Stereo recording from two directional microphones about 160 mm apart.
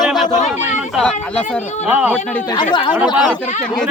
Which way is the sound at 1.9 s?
10° right (ahead or behind).